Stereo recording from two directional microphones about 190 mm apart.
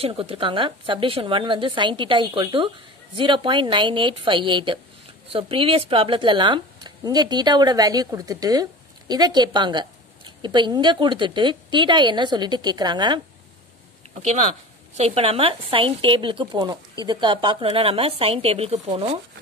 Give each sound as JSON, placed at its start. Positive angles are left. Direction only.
{"t": 0.0, "sound": "speech", "side_deg": -30}
{"t": 14.1, "sound": "speech", "side_deg": -35}